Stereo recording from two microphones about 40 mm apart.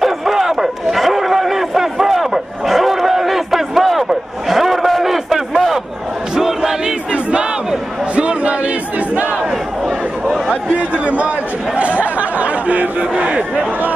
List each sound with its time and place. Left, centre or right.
0.0 s a sound: centre
6.3 s battle cry: centre
7.1 s battle cry: right
10.8 s chatter: right